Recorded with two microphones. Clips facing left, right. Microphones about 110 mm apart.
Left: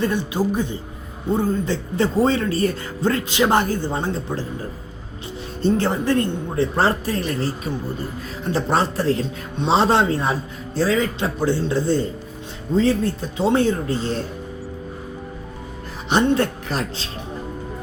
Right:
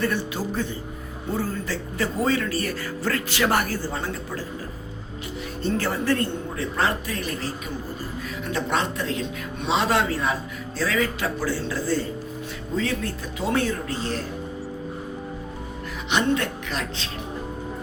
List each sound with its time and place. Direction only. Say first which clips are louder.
0.0 s a man's voice: left 5 dB; 20° left (ahead or behind)
5.6 s a man's voice: left 5 dB; 25° left (ahead or behind)
6.7 s a man's voice: left 2 dB; 35° left (ahead or behind)
16.0 s speech: left 5 dB; 35° left (ahead or behind)